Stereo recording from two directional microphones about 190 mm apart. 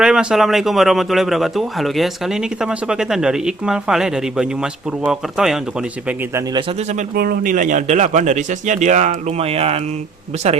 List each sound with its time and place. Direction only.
0.0 s speech: 5° right (ahead or behind)
7.2 s speech: 50° right (ahead or behind); by 9.8 s 30° right (ahead or behind)